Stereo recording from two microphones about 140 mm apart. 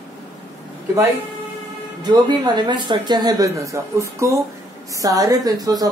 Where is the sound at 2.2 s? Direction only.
30° right (ahead or behind).